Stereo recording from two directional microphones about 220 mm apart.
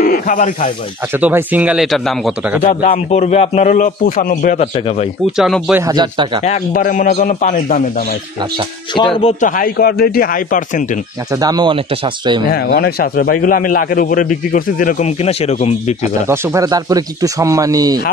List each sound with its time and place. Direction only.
0.0 s speech: 40° left (ahead or behind)
1.1 s speech: 10° right (ahead or behind)
2.6 s a man's voice: 30° left (ahead or behind)
4.7 s speech: 25° left (ahead or behind)
5.3 s speech: centre (ahead or behind); by 6.4 s 20° right (ahead or behind)
6.4 s a man's voice: 35° left (ahead or behind)
8.9 s speech: 20° left (ahead or behind)
9.4 s a man's voice: 40° left (ahead or behind)
11.3 s speech: 15° right (ahead or behind)
12.4 s a man's voice: 45° left (ahead or behind)
16.0 s speech: 10° right (ahead or behind)